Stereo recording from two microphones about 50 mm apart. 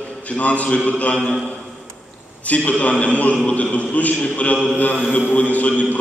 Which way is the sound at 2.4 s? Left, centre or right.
Left.